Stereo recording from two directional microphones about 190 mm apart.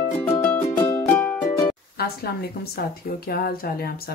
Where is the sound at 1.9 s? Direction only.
55° left (ahead or behind).